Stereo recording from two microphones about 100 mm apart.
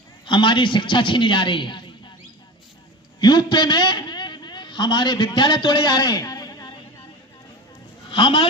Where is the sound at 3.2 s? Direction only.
50° left (ahead or behind).